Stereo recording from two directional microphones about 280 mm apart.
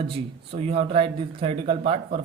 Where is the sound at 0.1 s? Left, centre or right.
Right.